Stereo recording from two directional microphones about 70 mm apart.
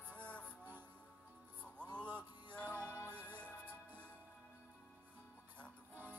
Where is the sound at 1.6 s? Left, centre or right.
Centre.